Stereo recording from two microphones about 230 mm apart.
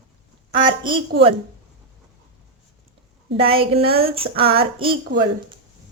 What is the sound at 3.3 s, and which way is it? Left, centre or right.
A woman's voice, right.